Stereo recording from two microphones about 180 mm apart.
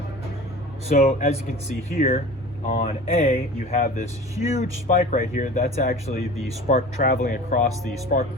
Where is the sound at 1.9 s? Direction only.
50° left (ahead or behind).